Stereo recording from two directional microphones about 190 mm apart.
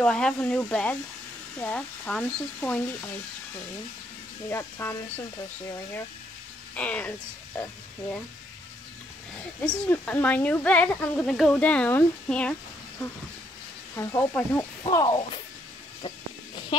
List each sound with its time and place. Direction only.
0.0 s speech: 5° left (ahead or behind)
4.5 s speech: 10° left (ahead or behind)
6.7 s speech: 5° left (ahead or behind)
9.8 s speech: 10° left (ahead or behind)
13.9 s speech: 15° left (ahead or behind)